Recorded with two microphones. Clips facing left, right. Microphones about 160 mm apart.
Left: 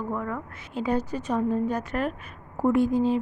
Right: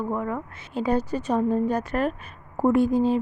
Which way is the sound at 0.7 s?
35° right (ahead or behind).